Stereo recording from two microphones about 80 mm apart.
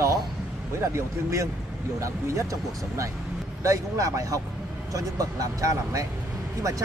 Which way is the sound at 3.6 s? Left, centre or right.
Right.